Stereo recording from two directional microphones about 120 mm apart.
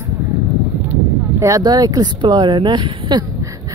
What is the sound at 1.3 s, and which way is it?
Speech, 25° right (ahead or behind).